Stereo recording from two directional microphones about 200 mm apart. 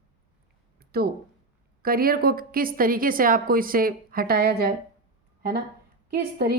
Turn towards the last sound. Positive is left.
turn(degrees=-50)  # may be behind; listen again after turning